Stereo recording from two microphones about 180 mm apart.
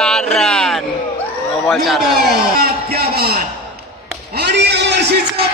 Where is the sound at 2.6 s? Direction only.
60° right (ahead or behind).